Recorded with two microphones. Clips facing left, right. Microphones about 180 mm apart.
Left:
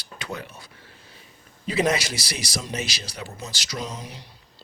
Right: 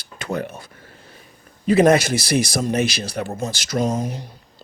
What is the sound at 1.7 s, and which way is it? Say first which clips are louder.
A man's voice: right 9 dB; 50° right (ahead or behind).